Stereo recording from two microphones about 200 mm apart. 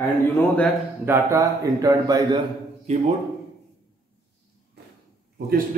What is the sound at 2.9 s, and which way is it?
Speech, 35° right (ahead or behind).